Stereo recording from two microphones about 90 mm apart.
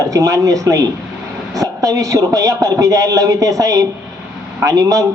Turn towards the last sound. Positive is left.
turn(degrees=-40)  # may be behind; listen again after turning